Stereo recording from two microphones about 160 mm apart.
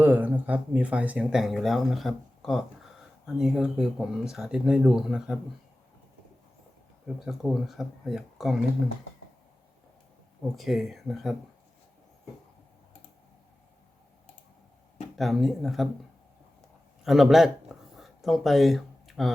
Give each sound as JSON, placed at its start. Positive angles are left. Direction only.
{"t": 0.0, "sound": "speech", "side_deg": -10}
{"t": 7.3, "sound": "speech", "side_deg": 0}
{"t": 10.5, "sound": "speech", "side_deg": 0}
{"t": 15.2, "sound": "speech", "side_deg": 0}
{"t": 16.6, "sound": "a sound", "side_deg": 0}